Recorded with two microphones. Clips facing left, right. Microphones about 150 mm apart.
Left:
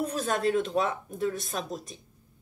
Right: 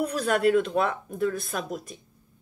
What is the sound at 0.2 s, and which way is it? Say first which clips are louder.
Speech: right 5 dB; 25° left (ahead or behind).